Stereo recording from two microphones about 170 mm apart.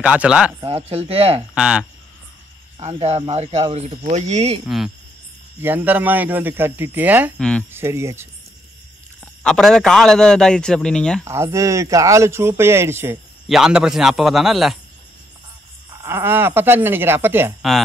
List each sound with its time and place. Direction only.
0.0 s speech: 5° right (ahead or behind)
0.8 s speech: 35° right (ahead or behind)
1.5 s a man's voice: 5° right (ahead or behind)
2.8 s speech: 40° right (ahead or behind)
4.6 s a man's voice: centre (ahead or behind)
7.3 s a man's voice: 5° left (ahead or behind)
7.7 s speech: 15° right (ahead or behind)
9.2 s a man's voice: 5° left (ahead or behind)
11.2 s speech: 15° right (ahead or behind)
13.5 s a man's voice: 5° right (ahead or behind)
16.0 s speech: 15° right (ahead or behind)
17.6 s a man's voice: centre (ahead or behind)